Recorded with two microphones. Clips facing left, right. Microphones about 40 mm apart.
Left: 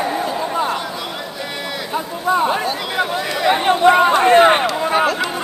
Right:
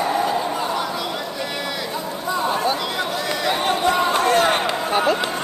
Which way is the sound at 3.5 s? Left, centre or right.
Left.